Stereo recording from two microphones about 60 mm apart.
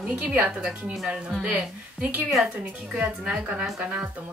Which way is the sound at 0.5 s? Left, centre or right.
Centre.